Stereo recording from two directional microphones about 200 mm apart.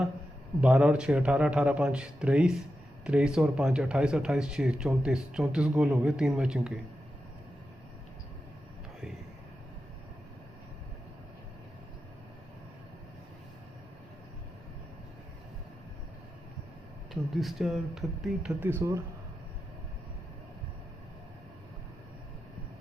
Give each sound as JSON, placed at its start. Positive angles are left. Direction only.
{"t": 0.6, "sound": "speech", "side_deg": -5}
{"t": 17.3, "sound": "speech", "side_deg": 0}